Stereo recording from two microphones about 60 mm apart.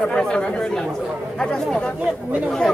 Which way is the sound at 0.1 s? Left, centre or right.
Centre.